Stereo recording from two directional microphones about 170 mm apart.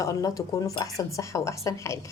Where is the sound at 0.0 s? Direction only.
20° left (ahead or behind).